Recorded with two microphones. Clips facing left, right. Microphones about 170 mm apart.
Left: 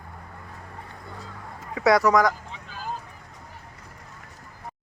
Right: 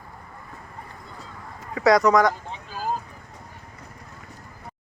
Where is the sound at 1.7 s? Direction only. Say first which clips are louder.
Right 2 dB; 5° left (ahead or behind).